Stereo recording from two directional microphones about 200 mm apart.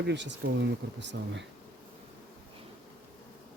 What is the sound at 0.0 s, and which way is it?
Speech, 60° right (ahead or behind).